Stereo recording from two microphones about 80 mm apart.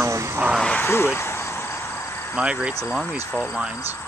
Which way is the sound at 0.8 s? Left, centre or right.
Left.